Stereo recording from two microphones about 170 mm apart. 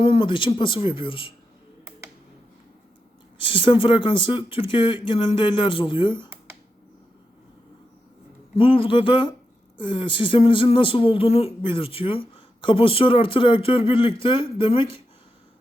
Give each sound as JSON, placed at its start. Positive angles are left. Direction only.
{"t": 0.0, "sound": "speech", "side_deg": 30}
{"t": 3.3, "sound": "speech", "side_deg": 30}
{"t": 8.5, "sound": "speech", "side_deg": 30}